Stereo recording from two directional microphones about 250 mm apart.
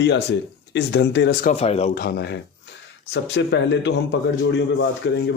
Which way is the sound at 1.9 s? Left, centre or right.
Left.